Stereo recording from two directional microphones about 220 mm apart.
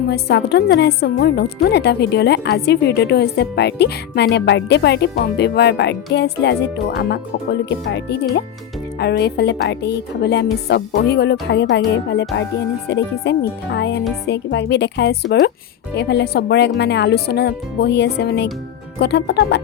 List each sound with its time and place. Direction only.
0.1 s a woman's voice: 50° left (ahead or behind)